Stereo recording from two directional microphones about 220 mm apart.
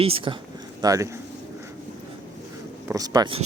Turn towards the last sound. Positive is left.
turn(degrees=-20)  # may be behind; listen again after turning